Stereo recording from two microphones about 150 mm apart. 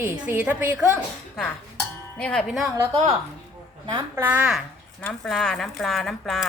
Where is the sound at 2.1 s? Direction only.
10° left (ahead or behind).